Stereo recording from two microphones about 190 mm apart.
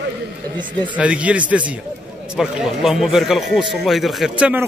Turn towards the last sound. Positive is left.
turn(degrees=-5)  # may be behind; listen again after turning